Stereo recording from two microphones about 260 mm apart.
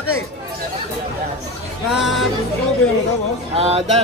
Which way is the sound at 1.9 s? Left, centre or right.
Centre.